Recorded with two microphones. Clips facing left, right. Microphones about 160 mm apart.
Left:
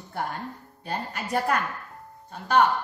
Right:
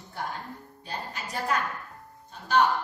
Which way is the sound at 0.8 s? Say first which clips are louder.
Left 5 dB; 60° left (ahead or behind).